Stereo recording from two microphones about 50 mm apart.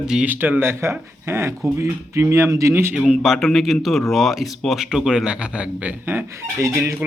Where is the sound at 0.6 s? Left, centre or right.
Right.